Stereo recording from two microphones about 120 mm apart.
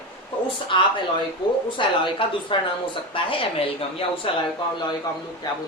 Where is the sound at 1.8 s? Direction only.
45° left (ahead or behind).